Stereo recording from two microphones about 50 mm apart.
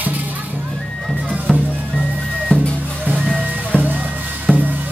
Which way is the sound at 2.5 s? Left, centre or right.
Left.